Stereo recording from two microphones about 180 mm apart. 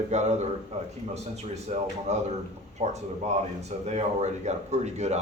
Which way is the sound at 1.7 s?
40° right (ahead or behind).